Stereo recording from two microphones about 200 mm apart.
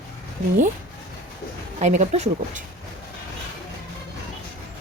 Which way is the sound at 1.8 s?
35° right (ahead or behind).